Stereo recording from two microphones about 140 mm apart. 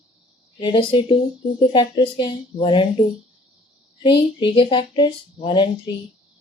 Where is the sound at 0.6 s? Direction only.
40° left (ahead or behind).